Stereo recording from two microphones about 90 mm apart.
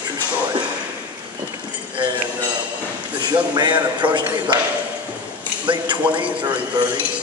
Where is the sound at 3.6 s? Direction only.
55° right (ahead or behind).